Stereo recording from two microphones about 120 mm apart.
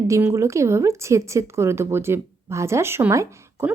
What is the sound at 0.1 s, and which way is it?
A woman's voice, 20° right (ahead or behind).